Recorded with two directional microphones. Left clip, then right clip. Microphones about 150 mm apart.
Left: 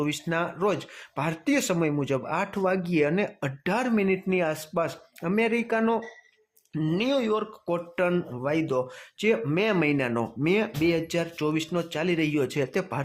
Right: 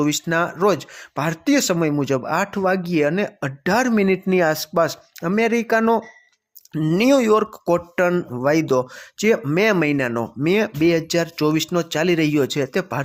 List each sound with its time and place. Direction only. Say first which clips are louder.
0.0 s speech: right 8 dB; 35° right (ahead or behind)
6.9 s speech: right 10 dB; 50° right (ahead or behind)
7.9 s speech: right 7 dB; 35° right (ahead or behind)